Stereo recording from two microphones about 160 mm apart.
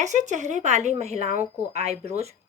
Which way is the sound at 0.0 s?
50° right (ahead or behind).